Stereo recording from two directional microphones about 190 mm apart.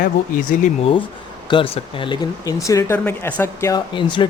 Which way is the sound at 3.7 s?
25° left (ahead or behind).